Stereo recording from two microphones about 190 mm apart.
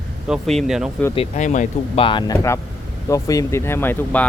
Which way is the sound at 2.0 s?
25° left (ahead or behind).